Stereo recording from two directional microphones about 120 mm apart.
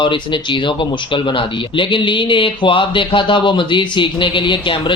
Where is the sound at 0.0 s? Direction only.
45° left (ahead or behind).